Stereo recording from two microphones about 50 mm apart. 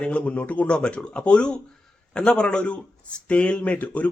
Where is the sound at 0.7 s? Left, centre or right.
Centre.